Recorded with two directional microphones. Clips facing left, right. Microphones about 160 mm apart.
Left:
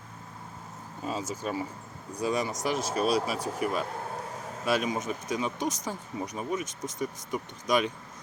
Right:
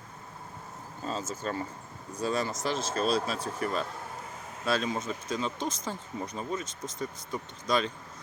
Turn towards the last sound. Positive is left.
turn(degrees=15)  # may be behind; listen again after turning